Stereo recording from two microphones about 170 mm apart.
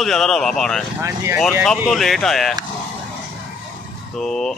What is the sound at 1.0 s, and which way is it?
Speech, 15° right (ahead or behind).